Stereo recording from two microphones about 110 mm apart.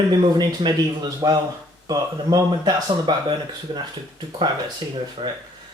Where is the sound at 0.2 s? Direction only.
40° right (ahead or behind).